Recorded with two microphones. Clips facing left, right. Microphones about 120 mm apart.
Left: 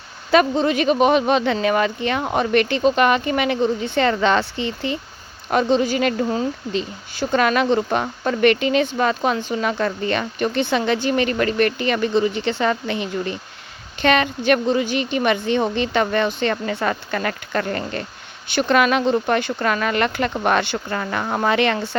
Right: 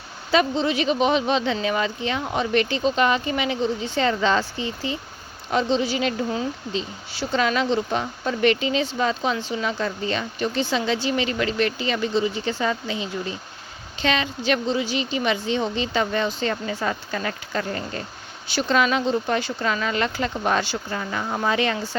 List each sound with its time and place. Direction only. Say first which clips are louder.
0.3 s speech: left 4 dB; 55° left (ahead or behind)
5.5 s speech: left 4 dB; 55° left (ahead or behind)